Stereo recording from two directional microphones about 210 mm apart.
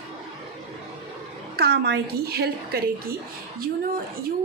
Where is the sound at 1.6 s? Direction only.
50° right (ahead or behind).